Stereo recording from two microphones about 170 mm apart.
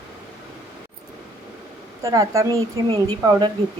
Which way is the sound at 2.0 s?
20° right (ahead or behind).